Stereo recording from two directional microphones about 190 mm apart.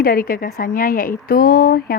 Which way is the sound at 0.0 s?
50° left (ahead or behind).